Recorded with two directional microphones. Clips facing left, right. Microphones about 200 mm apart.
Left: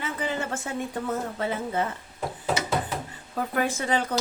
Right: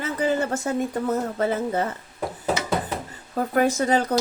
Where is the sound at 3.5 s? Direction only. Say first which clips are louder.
Right 6 dB; 40° right (ahead or behind).